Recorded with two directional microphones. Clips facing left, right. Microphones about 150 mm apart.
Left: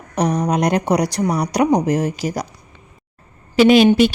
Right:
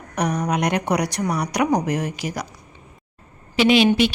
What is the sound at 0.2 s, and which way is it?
Speech, 30° left (ahead or behind).